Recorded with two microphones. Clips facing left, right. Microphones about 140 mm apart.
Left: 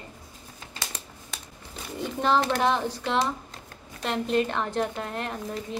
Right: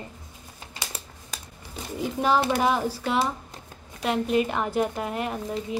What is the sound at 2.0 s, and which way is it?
Speech, 5° right (ahead or behind).